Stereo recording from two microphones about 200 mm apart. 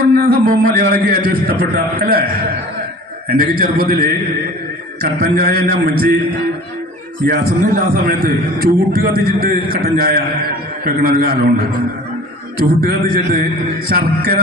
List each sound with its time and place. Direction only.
0.0 s speech: 50° right (ahead or behind)
3.2 s speech: 45° right (ahead or behind)
7.2 s speech: 45° right (ahead or behind)
12.5 s speech: 45° right (ahead or behind)